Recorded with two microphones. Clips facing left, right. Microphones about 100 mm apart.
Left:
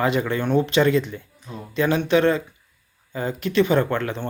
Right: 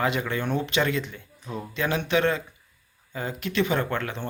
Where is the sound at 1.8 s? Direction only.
5° right (ahead or behind).